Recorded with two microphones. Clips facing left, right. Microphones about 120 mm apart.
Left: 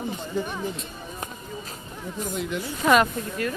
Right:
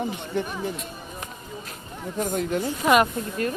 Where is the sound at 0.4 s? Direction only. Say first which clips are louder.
Right 1 dB; 65° right (ahead or behind).